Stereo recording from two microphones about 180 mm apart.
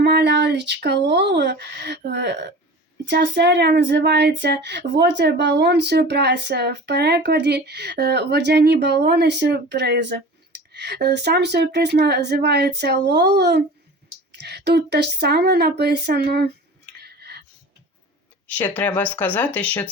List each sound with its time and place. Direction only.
0.0 s speech: 65° right (ahead or behind)
17.0 s a sound: 65° right (ahead or behind)
18.4 s speech: 10° left (ahead or behind)